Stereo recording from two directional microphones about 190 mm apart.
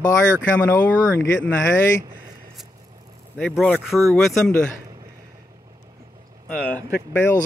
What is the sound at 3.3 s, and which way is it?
Speech, 5° left (ahead or behind).